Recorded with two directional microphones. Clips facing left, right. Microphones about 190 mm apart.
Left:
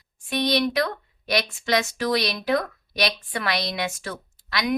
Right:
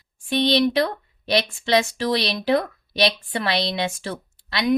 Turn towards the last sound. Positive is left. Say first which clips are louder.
# right 4 dB
turn(degrees=-30)  # may be behind; listen again after turning